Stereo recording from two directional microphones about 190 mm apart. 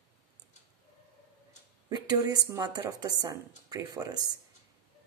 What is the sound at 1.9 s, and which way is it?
Speech, 20° right (ahead or behind).